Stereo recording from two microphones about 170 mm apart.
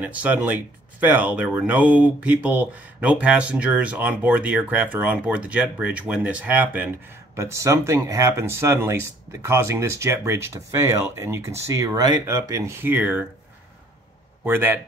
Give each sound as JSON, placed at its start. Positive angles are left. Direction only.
{"t": 0.0, "sound": "speech", "side_deg": -10}
{"t": 14.4, "sound": "speech", "side_deg": -10}